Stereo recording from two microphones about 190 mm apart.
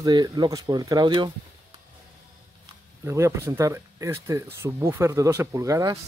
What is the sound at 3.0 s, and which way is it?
Speech, 15° right (ahead or behind).